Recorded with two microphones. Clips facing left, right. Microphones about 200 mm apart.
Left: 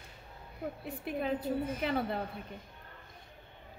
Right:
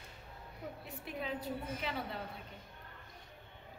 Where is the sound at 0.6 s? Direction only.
55° left (ahead or behind).